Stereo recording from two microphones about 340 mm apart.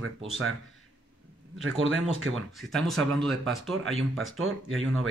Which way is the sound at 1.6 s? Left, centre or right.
Right.